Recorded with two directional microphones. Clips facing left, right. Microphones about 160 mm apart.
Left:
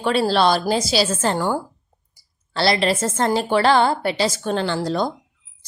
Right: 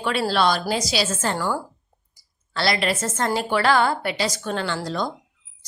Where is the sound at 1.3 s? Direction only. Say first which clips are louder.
Left 3 dB; 20° left (ahead or behind).